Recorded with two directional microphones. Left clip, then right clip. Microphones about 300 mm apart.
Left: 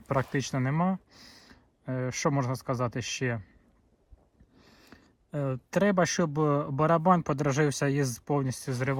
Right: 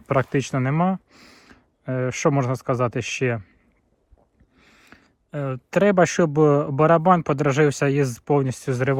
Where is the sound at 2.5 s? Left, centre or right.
Centre.